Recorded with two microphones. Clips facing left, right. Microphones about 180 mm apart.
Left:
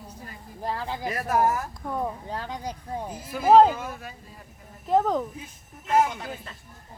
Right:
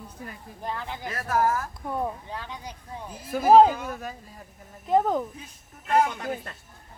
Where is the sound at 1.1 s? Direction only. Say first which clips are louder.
Left 1 dB; 20° left (ahead or behind).